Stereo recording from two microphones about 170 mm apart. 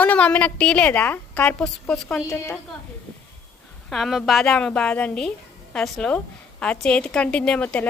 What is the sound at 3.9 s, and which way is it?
A woman's voice, centre (ahead or behind).